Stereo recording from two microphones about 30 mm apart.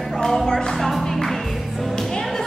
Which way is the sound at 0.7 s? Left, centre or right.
Centre.